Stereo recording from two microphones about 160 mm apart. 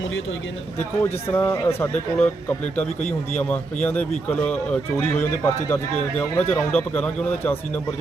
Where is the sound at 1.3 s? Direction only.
15° left (ahead or behind).